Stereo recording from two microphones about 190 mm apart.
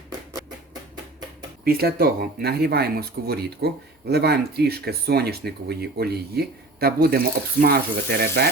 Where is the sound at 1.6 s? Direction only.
55° right (ahead or behind).